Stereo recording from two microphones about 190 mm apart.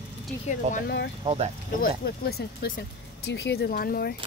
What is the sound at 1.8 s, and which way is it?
Speech, 55° left (ahead or behind).